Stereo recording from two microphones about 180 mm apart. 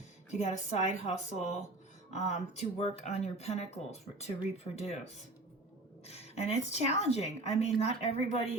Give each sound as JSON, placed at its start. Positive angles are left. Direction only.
{"t": 0.3, "sound": "speech", "side_deg": 40}
{"t": 6.1, "sound": "speech", "side_deg": 35}